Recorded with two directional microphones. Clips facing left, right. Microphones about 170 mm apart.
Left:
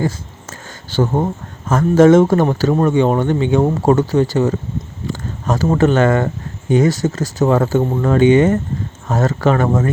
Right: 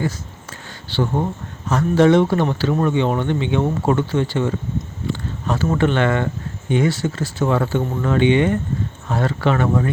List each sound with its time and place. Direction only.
0.9 s speech: 45° left (ahead or behind)